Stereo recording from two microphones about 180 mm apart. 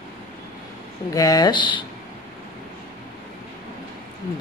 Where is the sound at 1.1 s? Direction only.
20° left (ahead or behind).